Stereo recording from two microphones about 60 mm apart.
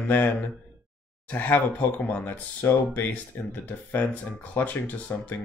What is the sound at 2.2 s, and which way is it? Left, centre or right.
Speech, left.